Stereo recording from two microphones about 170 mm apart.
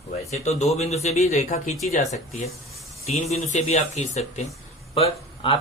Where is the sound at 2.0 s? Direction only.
Centre (ahead or behind).